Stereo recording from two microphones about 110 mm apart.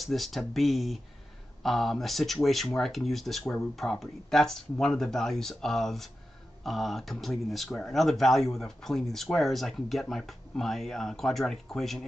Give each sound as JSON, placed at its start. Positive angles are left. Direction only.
{"t": 0.0, "sound": "speech", "side_deg": 0}